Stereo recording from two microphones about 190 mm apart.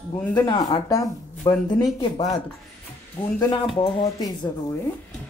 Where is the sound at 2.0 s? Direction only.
30° left (ahead or behind).